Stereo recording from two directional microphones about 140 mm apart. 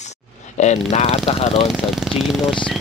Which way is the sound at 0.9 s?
45° left (ahead or behind).